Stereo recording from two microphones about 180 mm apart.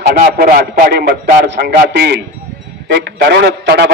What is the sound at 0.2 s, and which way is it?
Speech, 50° right (ahead or behind).